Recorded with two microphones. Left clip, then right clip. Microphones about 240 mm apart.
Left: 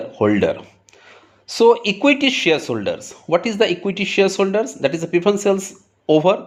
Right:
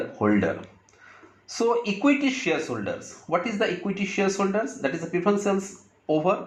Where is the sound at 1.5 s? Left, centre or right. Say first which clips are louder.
Left 10 dB; left.